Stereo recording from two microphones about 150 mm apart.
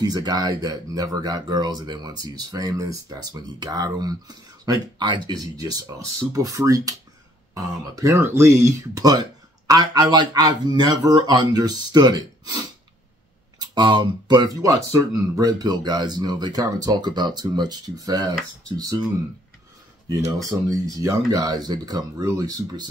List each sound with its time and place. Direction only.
0.0 s speech: 25° right (ahead or behind)
20.4 s speech: 20° right (ahead or behind)